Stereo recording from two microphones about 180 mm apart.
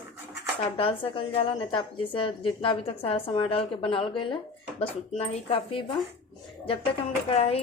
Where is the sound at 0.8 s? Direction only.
30° left (ahead or behind).